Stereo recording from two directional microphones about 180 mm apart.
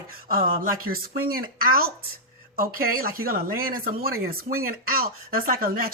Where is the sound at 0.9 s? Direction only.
55° right (ahead or behind).